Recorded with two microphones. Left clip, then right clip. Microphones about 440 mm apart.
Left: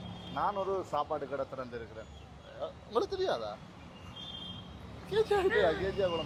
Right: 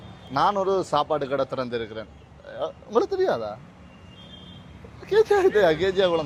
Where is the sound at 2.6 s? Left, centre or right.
Right.